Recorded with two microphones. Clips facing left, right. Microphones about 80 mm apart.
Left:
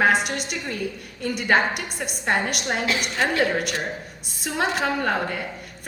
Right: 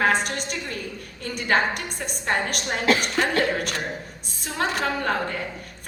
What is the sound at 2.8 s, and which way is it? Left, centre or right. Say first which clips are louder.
Speech: right 5 dB; right.